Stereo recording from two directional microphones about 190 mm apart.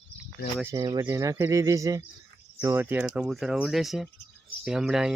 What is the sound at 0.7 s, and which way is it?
Speech, 20° right (ahead or behind).